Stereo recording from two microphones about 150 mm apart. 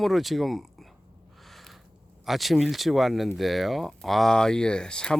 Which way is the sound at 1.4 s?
Centre (ahead or behind).